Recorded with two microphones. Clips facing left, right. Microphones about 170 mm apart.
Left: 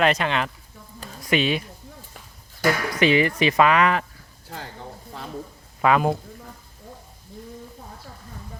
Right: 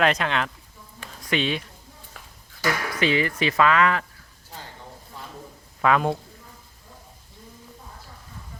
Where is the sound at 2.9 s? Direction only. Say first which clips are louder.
Left 4 dB; 15° left (ahead or behind).